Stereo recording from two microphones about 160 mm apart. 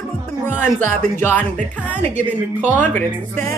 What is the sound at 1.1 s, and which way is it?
Speech, 10° left (ahead or behind).